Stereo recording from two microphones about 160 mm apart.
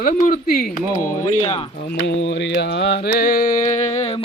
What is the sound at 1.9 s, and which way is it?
Mantra, 90° left.